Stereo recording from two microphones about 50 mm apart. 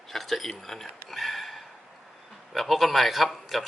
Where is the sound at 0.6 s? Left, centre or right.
Centre.